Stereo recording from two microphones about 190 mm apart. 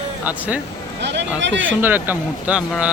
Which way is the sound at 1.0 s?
65° right (ahead or behind).